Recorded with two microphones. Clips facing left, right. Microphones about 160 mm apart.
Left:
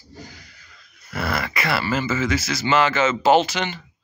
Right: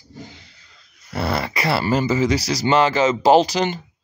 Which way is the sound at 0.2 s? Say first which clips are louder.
Right 3 dB; 25° right (ahead or behind).